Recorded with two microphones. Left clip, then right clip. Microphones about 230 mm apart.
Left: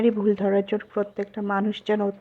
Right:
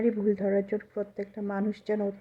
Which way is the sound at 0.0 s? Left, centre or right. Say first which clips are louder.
Left 5 dB; centre.